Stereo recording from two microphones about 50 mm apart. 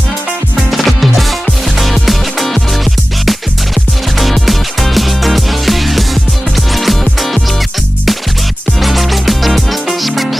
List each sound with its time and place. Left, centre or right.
0.7 s music: centre
8.8 s music: centre